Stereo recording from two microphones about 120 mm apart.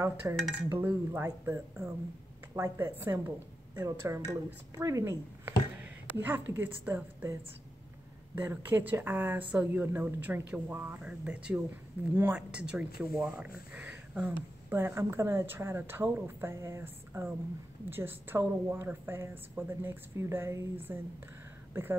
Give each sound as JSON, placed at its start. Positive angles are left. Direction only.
{"t": 0.2, "sound": "a woman's voice", "side_deg": -15}
{"t": 8.4, "sound": "a woman's voice", "side_deg": -20}